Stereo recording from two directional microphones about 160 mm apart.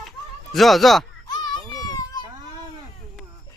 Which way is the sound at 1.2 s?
25° left (ahead or behind).